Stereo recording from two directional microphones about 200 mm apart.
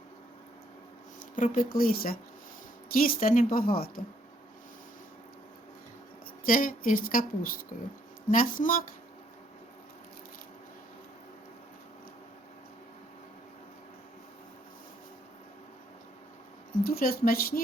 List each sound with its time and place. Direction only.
1.4 s speech: 45° left (ahead or behind)
6.4 s speech: 45° left (ahead or behind)
16.8 s speech: 50° left (ahead or behind)